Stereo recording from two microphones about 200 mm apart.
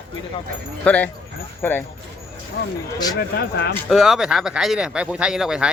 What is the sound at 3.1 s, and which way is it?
Speech, 55° left (ahead or behind).